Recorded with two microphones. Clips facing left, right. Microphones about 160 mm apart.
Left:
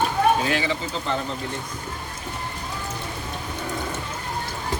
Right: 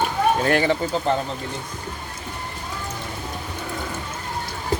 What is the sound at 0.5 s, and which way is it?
Speech, 50° right (ahead or behind).